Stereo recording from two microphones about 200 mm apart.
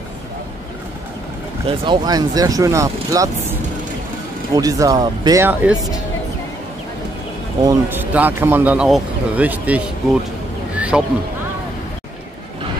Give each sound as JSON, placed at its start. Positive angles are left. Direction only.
{"t": 1.7, "sound": "speech", "side_deg": -20}
{"t": 4.6, "sound": "speech", "side_deg": -15}
{"t": 7.6, "sound": "speech", "side_deg": -10}
{"t": 10.8, "sound": "a sound", "side_deg": -5}